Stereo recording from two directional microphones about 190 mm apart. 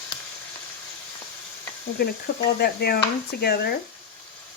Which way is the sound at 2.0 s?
55° left (ahead or behind).